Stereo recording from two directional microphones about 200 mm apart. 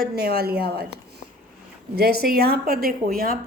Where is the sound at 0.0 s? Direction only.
50° right (ahead or behind).